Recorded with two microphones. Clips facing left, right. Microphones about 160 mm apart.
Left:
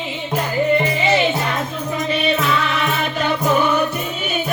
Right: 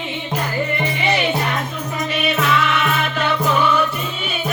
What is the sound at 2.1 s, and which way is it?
Music, 35° left (ahead or behind).